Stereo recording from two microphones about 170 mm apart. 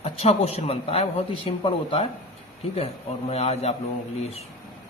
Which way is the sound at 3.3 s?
40° left (ahead or behind).